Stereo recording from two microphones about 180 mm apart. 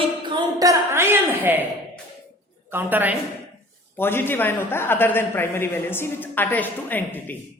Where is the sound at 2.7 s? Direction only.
10° right (ahead or behind).